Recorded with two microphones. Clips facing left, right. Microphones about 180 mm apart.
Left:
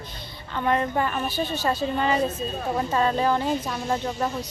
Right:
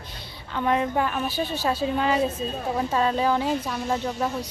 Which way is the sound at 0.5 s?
5° right (ahead or behind).